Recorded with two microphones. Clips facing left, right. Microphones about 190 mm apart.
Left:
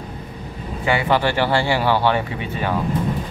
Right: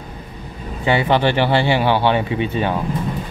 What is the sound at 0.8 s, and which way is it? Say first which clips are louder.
Speech: right 3 dB; 25° right (ahead or behind).